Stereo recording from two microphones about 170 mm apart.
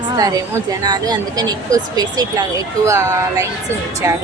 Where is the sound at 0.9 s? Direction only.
25° right (ahead or behind).